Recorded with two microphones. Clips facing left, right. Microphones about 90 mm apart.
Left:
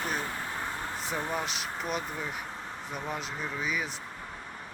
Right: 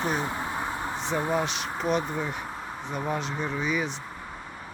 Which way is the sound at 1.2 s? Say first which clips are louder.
Right 7 dB; 10° right (ahead or behind).